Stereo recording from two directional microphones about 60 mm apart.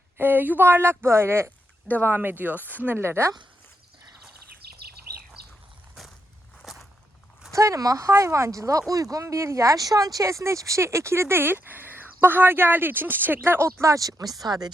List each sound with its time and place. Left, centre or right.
0.2 s speech: right
6.6 s walk: centre
7.5 s speech: right
8.1 s speech: right